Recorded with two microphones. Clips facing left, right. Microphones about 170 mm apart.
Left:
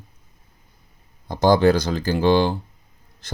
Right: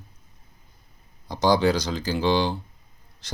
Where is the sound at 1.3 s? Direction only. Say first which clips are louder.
Left 5 dB; 50° left (ahead or behind).